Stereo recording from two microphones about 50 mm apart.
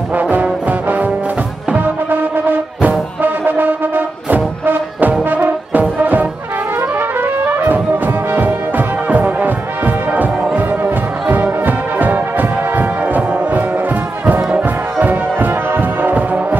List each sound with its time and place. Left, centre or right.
0.1 s brass instrument: right
1.8 s music: right
5.2 s brass instrument: right
6.8 s music: right
10.5 s brass instrument: right
13.6 s brass instrument: right
15.0 s music: right